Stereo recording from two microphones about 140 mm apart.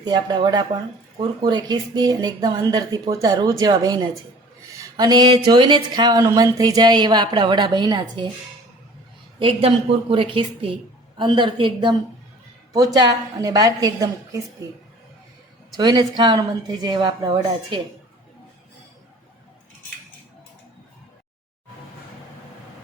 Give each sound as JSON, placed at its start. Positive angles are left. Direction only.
{"t": 0.0, "sound": "speech", "side_deg": -30}
{"t": 9.4, "sound": "speech", "side_deg": -40}
{"t": 15.8, "sound": "speech", "side_deg": -30}